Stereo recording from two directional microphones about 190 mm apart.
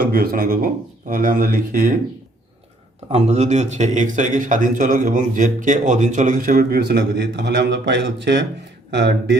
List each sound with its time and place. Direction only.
0.0 s speech: 50° right (ahead or behind)
3.1 s speech: 35° right (ahead or behind); by 9.4 s 65° right (ahead or behind)